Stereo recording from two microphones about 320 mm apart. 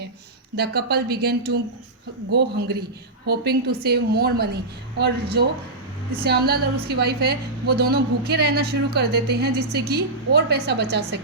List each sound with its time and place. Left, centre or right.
0.5 s a woman's voice: right